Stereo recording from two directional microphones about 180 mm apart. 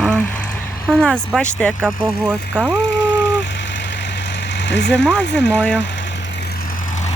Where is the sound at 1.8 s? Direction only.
10° right (ahead or behind).